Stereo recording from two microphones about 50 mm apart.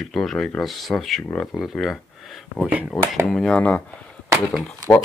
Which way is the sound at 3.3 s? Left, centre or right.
Centre.